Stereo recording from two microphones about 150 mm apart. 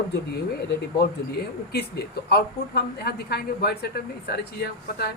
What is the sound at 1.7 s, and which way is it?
A woman's voice, 90° left.